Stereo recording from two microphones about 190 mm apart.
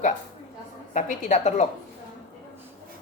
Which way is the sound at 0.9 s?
40° left (ahead or behind).